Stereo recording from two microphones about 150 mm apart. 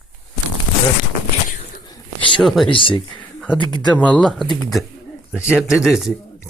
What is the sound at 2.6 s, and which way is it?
Speech, 35° left (ahead or behind).